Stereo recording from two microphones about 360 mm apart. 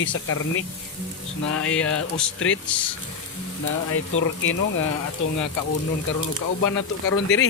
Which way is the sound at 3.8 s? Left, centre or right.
Left.